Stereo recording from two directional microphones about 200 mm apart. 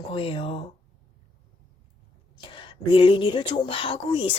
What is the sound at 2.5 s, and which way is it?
Speech, 25° left (ahead or behind).